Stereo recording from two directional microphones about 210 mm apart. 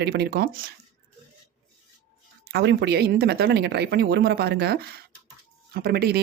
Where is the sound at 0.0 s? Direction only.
50° right (ahead or behind).